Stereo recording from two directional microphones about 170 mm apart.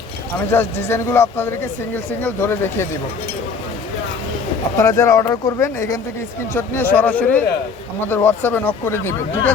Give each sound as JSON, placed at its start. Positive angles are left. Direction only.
{"t": 0.5, "sound": "speech", "side_deg": 15}
{"t": 4.8, "sound": "speech", "side_deg": 15}